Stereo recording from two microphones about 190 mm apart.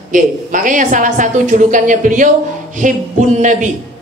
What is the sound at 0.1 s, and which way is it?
A woman's voice, 45° right (ahead or behind).